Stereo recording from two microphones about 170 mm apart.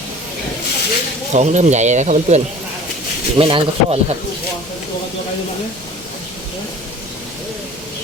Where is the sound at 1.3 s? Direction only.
45° right (ahead or behind).